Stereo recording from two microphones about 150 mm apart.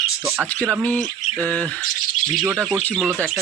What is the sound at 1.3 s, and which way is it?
Speech, 10° left (ahead or behind).